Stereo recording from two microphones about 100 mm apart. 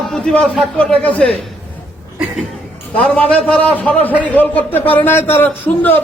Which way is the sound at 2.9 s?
15° left (ahead or behind).